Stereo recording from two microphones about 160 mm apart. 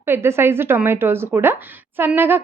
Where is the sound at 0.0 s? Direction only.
15° right (ahead or behind).